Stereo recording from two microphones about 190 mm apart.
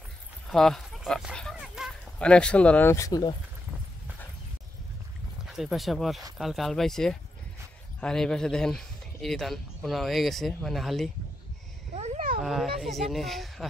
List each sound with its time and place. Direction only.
0.5 s speech: centre (ahead or behind); by 3.3 s 20° left (ahead or behind)
5.5 s speech: centre (ahead or behind)
11.9 s a sound: 35° right (ahead or behind)
12.4 s speech: centre (ahead or behind)